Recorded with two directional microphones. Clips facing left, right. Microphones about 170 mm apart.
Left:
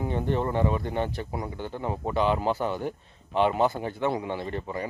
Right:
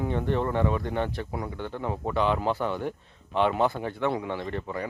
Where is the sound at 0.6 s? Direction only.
5° left (ahead or behind).